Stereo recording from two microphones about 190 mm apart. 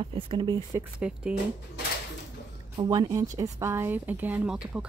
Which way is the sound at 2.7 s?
25° right (ahead or behind).